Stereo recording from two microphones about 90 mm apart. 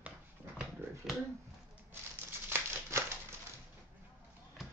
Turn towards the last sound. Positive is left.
turn(degrees=-25)  # may be behind; listen again after turning